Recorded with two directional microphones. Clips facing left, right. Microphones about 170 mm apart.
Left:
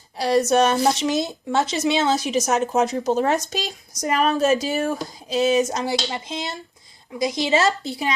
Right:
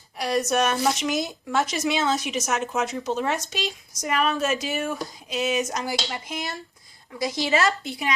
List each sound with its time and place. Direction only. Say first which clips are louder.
0.2 s speech: left 5 dB; 30° left (ahead or behind)